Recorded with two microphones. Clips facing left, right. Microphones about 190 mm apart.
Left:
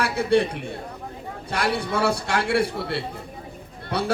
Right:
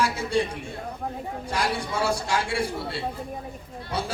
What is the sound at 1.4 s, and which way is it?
Speech, 65° left (ahead or behind).